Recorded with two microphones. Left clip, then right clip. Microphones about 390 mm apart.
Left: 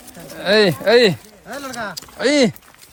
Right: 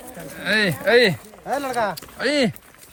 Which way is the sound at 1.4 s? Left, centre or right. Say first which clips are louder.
Right 5 dB; centre.